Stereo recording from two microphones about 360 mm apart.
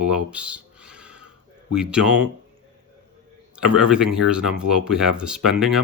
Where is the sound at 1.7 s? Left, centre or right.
Centre.